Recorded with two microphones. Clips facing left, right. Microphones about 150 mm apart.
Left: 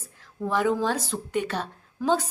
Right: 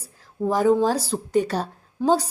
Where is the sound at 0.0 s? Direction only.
35° right (ahead or behind).